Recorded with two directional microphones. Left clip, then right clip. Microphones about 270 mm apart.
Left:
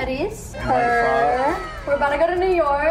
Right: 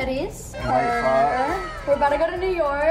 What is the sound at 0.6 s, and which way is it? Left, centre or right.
A woman's voice, centre.